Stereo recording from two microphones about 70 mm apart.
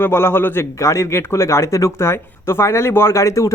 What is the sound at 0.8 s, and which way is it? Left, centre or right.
Speech, left.